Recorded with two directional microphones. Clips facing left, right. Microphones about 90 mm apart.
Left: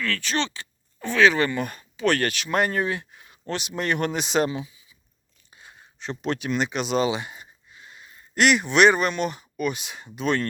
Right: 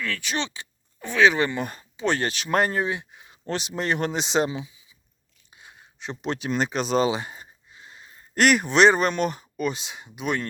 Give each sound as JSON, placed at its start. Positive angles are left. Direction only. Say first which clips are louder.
{"t": 0.0, "sound": "speech", "louder": "left 2 dB", "side_deg": -10}
{"t": 2.3, "sound": "speech", "louder": "right 1 dB", "side_deg": -35}
{"t": 5.5, "sound": "a sound", "louder": "left 1 dB", "side_deg": -15}
{"t": 8.4, "sound": "speech", "louder": "even", "side_deg": -40}